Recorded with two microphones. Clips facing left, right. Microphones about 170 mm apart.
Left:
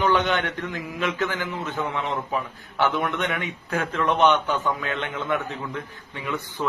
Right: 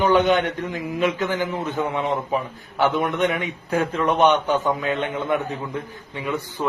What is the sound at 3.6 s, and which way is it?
Speech, 30° right (ahead or behind).